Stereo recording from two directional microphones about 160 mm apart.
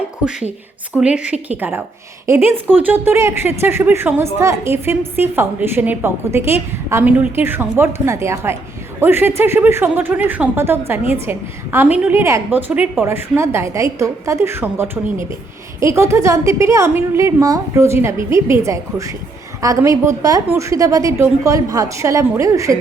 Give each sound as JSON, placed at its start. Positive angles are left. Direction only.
{"t": 0.9, "sound": "a woman's voice", "side_deg": -5}